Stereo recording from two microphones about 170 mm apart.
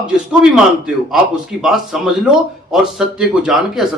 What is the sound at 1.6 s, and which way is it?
A man's voice, 5° right (ahead or behind).